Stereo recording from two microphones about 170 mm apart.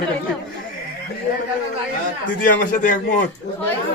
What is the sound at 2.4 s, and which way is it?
Speech, 55° left (ahead or behind).